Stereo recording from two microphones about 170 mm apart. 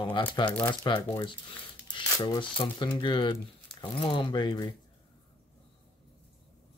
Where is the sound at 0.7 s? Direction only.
30° left (ahead or behind).